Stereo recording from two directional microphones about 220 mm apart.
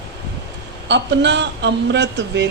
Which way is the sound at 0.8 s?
55° right (ahead or behind).